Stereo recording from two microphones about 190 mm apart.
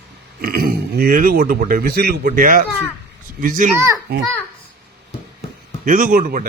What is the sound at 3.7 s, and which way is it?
Speech, 15° right (ahead or behind).